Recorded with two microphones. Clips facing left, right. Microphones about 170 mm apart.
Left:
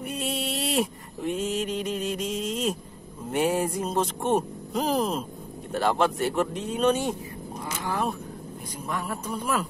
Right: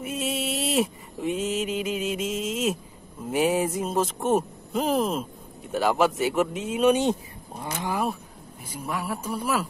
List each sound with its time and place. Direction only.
0.0 s a sound: centre (ahead or behind)
3.3 s speech: centre (ahead or behind)
6.9 s speech: 20° right (ahead or behind)
8.7 s speech: 10° right (ahead or behind)